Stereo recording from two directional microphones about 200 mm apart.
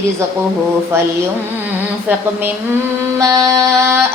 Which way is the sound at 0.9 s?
10° right (ahead or behind).